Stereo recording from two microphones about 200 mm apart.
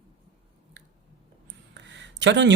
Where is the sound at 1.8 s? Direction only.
60° right (ahead or behind).